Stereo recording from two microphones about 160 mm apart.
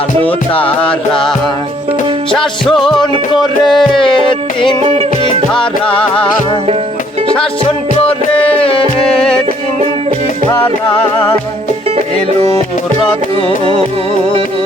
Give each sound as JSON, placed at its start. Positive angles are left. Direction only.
{"t": 0.8, "sound": "music", "side_deg": 5}
{"t": 2.6, "sound": "music", "side_deg": 0}
{"t": 4.8, "sound": "music", "side_deg": -35}
{"t": 5.5, "sound": "music", "side_deg": 35}
{"t": 8.0, "sound": "music", "side_deg": 35}